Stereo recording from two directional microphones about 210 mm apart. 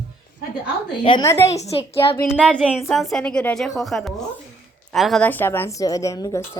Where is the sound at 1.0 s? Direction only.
20° left (ahead or behind).